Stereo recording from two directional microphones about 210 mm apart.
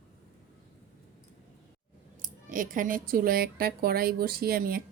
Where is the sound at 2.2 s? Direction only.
40° right (ahead or behind).